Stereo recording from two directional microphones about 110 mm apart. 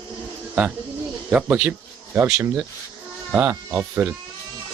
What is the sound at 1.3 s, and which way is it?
Speech, 20° right (ahead or behind).